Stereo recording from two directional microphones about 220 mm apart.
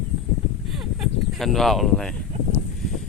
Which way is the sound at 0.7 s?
Centre (ahead or behind).